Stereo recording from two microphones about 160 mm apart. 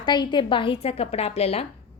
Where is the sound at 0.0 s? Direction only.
30° left (ahead or behind).